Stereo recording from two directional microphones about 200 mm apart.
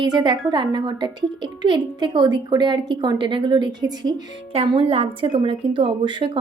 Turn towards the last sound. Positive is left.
turn(degrees=-25)  # may be behind; listen again after turning